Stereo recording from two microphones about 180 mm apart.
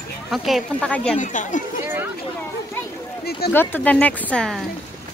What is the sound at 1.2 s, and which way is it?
Speech, 45° left (ahead or behind).